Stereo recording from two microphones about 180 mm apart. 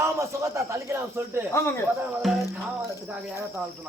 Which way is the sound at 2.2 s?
Centre (ahead or behind).